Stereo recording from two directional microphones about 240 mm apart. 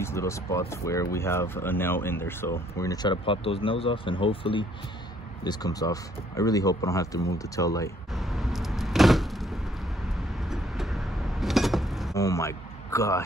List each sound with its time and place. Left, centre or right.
0.0 s speech: centre
8.1 s vehicle: centre
10.4 s a sound: centre
12.1 s speech: centre